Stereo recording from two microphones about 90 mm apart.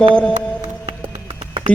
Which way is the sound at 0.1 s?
10° left (ahead or behind).